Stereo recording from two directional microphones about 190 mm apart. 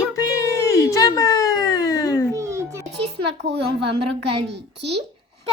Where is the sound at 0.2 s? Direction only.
15° left (ahead or behind).